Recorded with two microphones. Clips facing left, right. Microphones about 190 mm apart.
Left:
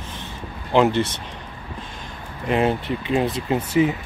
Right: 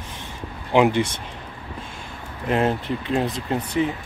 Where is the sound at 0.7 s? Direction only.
10° right (ahead or behind).